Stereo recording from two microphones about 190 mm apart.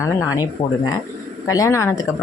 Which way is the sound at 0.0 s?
20° left (ahead or behind).